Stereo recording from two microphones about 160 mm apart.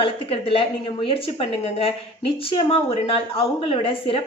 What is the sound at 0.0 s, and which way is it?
Speech, 35° left (ahead or behind).